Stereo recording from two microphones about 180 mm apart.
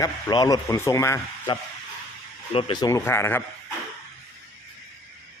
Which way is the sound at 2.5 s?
30° left (ahead or behind).